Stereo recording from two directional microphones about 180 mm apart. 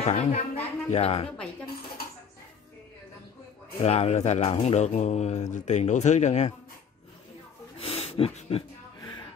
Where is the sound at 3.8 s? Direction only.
35° left (ahead or behind).